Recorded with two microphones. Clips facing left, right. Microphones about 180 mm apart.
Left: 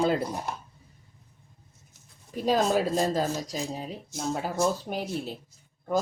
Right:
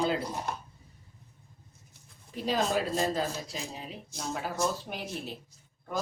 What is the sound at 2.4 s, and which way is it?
Speech, 45° left (ahead or behind).